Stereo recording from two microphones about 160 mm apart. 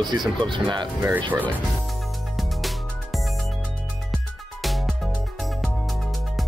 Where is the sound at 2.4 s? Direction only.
Centre (ahead or behind).